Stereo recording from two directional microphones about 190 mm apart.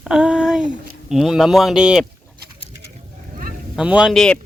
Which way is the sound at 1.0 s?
Centre (ahead or behind).